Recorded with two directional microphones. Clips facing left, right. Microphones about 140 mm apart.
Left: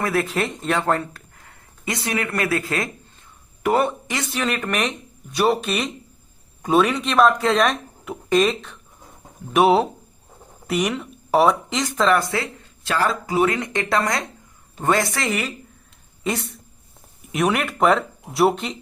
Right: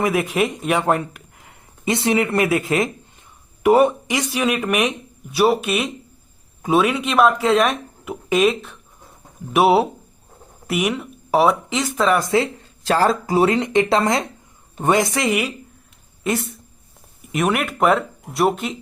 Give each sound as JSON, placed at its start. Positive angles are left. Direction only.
{"t": 0.0, "sound": "speech", "side_deg": -15}
{"t": 12.8, "sound": "speech", "side_deg": -35}
{"t": 16.2, "sound": "speech", "side_deg": 0}